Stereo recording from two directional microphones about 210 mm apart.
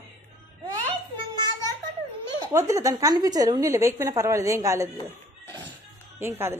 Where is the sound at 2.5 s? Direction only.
15° right (ahead or behind).